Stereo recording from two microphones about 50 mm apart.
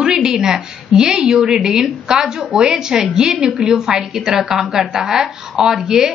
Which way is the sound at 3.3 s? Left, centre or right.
Right.